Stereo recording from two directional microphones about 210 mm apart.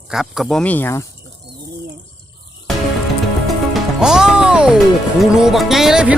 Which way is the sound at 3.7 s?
5° right (ahead or behind).